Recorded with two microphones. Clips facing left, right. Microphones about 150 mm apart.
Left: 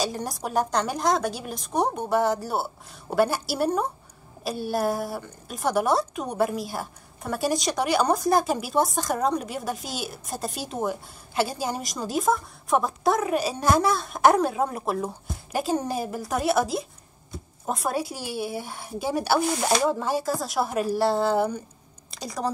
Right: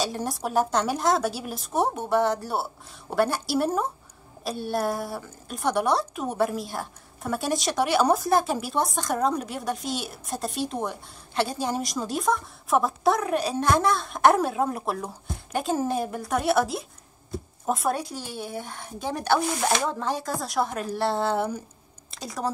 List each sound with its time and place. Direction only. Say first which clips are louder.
0.0 s a woman's voice: even; centre (ahead or behind)